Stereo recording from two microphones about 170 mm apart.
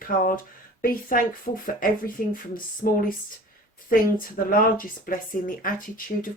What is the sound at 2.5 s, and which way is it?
Speech, 55° left (ahead or behind).